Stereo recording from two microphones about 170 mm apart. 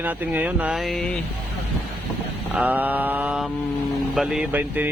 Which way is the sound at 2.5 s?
10° right (ahead or behind).